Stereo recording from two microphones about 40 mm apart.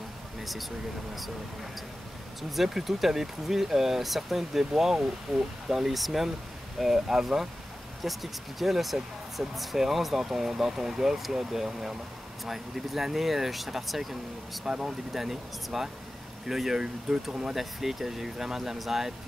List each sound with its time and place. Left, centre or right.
0.4 s speech: centre
2.5 s speech: centre
14.6 s speech: centre
15.1 s speech: centre
17.6 s speech: centre